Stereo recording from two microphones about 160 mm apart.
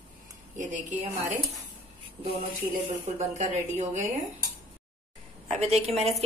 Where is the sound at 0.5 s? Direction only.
50° right (ahead or behind).